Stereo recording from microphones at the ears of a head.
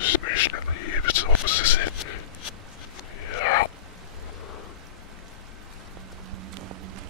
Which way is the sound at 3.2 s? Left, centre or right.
Left.